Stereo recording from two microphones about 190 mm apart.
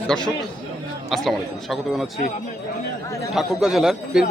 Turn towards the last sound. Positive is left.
turn(degrees=0)  # may be behind; listen again after turning